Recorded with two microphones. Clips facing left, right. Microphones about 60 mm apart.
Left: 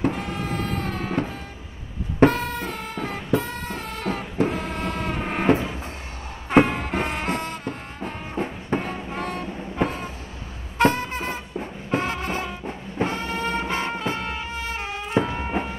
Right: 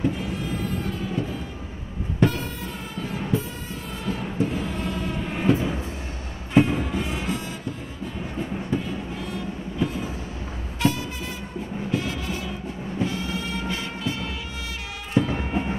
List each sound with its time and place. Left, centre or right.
0.0 s music: left